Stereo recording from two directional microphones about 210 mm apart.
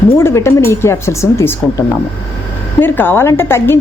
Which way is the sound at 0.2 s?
10° left (ahead or behind).